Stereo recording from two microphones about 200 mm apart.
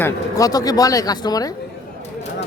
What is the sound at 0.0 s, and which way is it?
Speech, 15° left (ahead or behind).